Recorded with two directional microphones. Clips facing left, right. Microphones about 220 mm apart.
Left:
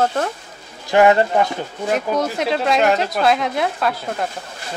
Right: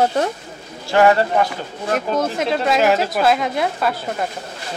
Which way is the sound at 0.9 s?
20° left (ahead or behind).